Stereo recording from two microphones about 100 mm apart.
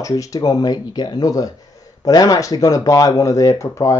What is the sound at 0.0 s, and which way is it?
Speech, 35° left (ahead or behind).